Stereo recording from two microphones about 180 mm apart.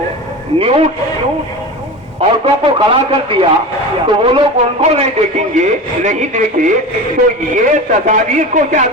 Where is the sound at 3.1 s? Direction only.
30° right (ahead or behind).